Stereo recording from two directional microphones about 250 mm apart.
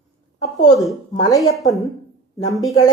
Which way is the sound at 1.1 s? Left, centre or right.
Centre.